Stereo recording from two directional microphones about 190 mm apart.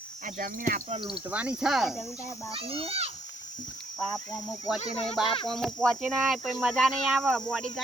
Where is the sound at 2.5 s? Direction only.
30° right (ahead or behind).